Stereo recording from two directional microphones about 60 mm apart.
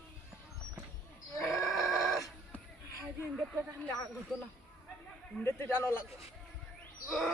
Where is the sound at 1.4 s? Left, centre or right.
Centre.